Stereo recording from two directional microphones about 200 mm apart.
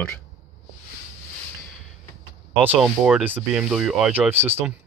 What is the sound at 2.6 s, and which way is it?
Speech, 5° right (ahead or behind).